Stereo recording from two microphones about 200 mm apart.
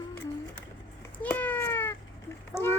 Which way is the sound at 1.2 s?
10° left (ahead or behind).